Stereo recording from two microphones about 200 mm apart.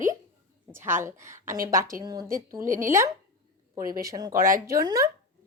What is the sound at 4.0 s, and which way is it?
Speech, 20° right (ahead or behind).